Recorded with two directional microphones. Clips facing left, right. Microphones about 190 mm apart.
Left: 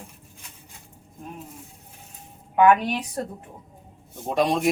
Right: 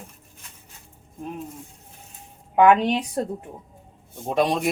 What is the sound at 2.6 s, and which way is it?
Speech, 20° right (ahead or behind).